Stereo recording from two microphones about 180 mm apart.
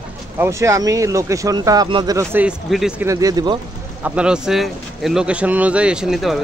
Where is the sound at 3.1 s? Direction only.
20° right (ahead or behind).